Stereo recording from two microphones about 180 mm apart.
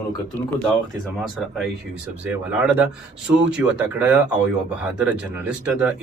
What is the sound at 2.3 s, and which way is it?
A man's voice, 5° right (ahead or behind).